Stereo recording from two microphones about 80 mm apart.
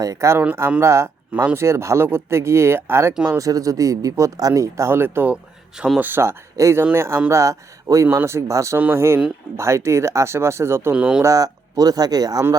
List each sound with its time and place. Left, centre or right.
0.0 s speech: right
3.3 s speech: right
6.6 s speech: right
10.9 s speech: centre
11.2 s speech: right